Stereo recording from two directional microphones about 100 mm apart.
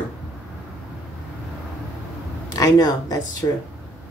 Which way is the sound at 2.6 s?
40° left (ahead or behind).